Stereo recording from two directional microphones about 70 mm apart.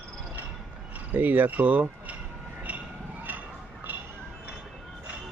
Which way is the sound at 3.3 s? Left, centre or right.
Right.